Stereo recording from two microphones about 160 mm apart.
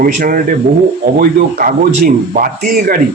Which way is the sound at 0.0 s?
60° right (ahead or behind).